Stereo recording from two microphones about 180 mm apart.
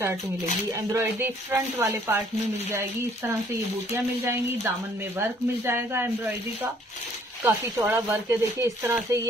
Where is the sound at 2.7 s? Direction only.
10° right (ahead or behind).